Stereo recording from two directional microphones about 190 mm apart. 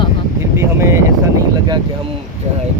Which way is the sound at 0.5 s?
15° right (ahead or behind).